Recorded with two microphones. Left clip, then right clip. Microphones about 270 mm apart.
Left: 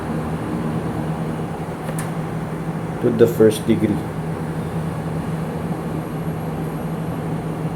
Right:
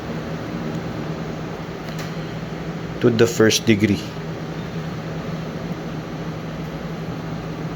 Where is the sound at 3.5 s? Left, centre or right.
Right.